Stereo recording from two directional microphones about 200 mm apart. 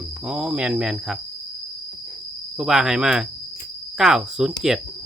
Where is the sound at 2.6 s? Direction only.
Centre (ahead or behind).